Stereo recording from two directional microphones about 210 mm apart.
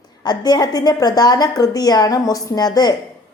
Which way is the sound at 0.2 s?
20° left (ahead or behind).